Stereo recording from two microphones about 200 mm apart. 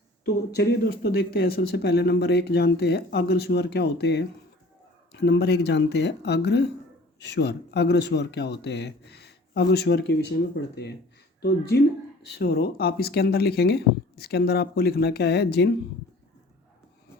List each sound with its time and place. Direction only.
0.5 s speech: 55° left (ahead or behind)
12.3 s speech: 50° left (ahead or behind)